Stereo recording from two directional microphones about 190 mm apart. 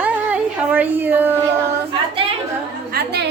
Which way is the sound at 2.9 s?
55° right (ahead or behind).